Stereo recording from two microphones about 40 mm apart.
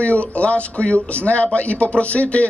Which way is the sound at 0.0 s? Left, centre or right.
Left.